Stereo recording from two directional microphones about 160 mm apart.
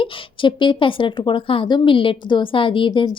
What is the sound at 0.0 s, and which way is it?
Speech, 30° left (ahead or behind).